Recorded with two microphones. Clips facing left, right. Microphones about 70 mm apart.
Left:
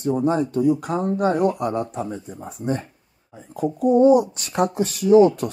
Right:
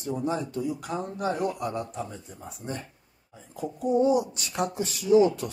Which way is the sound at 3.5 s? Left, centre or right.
Left.